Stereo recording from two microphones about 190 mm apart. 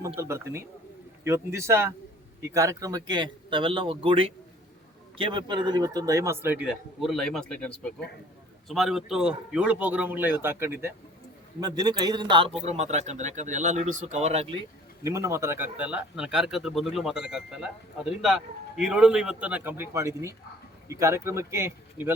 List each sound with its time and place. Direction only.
0.2 s a man's voice: 15° right (ahead or behind)
12.6 s speech: 35° right (ahead or behind)
15.0 s a man's voice: 15° right (ahead or behind)